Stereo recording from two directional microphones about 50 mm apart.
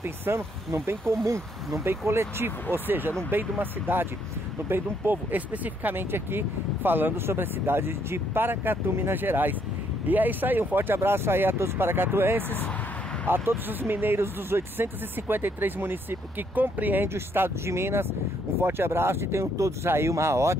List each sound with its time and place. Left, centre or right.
0.0 s speech: right
5.9 s speech: right
14.1 s speech: right
17.1 s speech: right